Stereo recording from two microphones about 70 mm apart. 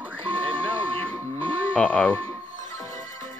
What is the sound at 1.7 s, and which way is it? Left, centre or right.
Speech, centre.